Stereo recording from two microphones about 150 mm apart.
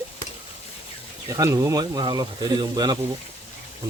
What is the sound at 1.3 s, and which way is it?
Speech, 20° right (ahead or behind).